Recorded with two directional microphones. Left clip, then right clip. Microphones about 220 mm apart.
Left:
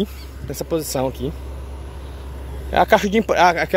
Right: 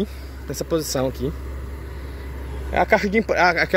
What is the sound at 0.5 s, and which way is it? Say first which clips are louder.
Speech: even; centre (ahead or behind).